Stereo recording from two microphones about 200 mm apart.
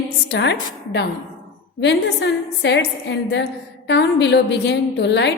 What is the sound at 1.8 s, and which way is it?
A woman's voice, 60° left (ahead or behind).